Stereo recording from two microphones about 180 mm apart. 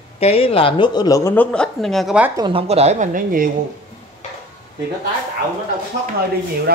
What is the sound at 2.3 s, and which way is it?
Speech, 25° right (ahead or behind).